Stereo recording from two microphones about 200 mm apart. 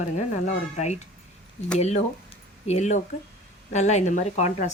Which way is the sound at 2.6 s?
35° left (ahead or behind).